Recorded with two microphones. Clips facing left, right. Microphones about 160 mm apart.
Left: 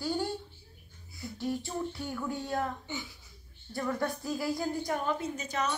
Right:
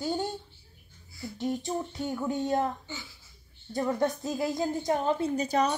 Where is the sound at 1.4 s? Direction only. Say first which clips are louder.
Right 3 dB; 20° right (ahead or behind).